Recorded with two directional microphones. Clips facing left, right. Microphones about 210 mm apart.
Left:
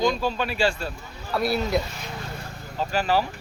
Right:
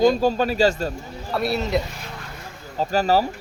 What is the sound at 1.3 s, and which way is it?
Speech, centre (ahead or behind).